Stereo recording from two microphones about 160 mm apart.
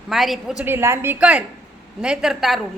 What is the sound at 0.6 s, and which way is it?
A woman's voice, 15° right (ahead or behind).